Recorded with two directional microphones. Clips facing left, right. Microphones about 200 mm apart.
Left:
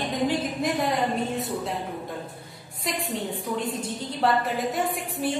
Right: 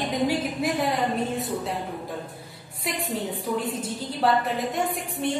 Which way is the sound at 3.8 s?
Centre (ahead or behind).